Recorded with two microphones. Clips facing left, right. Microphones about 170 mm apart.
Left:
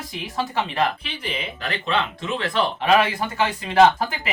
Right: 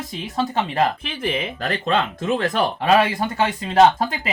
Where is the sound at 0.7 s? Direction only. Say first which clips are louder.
Right 3 dB; 50° right (ahead or behind).